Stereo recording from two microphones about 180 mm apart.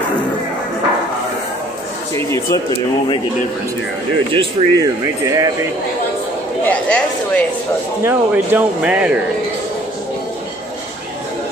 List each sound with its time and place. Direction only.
2.1 s a sound: 15° left (ahead or behind)
4.3 s speech: 25° right (ahead or behind)
6.6 s speech: 10° left (ahead or behind)
8.0 s speech: 10° right (ahead or behind)